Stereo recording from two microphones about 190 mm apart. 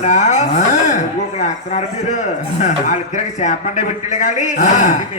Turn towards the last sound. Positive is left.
turn(degrees=40)  # may be behind; listen again after turning